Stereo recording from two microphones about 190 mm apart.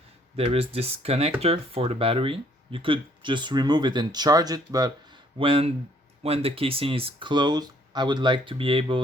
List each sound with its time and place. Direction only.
0.3 s speech: 30° right (ahead or behind)